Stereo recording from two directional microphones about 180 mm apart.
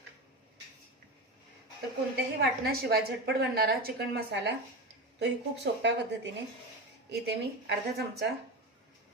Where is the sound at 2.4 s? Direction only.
65° right (ahead or behind).